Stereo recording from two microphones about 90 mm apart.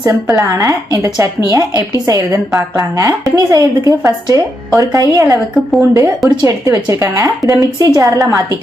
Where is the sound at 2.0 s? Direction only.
40° right (ahead or behind).